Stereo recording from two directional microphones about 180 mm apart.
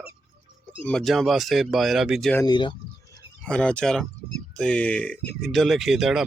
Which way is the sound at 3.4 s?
5° left (ahead or behind).